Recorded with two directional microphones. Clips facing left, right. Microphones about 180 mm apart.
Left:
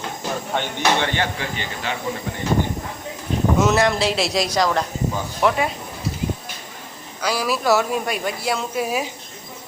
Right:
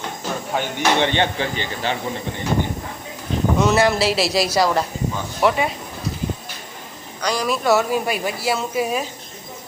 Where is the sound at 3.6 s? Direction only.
Centre (ahead or behind).